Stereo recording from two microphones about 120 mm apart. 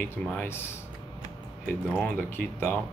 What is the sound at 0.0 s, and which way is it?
Speech, 15° left (ahead or behind).